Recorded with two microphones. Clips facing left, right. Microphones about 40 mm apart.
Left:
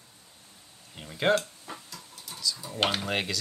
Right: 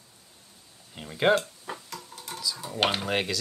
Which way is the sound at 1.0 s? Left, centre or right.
Centre.